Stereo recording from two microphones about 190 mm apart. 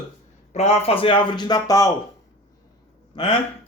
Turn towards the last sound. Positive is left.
turn(degrees=25)  # may be behind; listen again after turning